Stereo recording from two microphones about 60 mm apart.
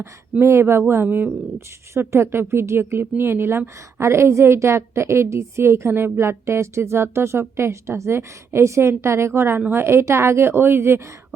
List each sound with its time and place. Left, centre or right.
0.4 s a woman's voice: right
9.8 s a woman's voice: right